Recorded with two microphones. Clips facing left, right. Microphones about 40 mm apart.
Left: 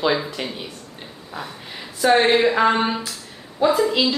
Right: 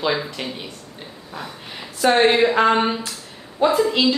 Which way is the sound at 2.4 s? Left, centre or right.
Centre.